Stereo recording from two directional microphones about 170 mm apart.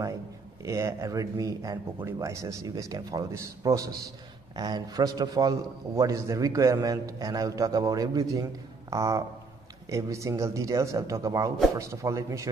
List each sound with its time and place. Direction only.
0.7 s a man's voice: 20° right (ahead or behind)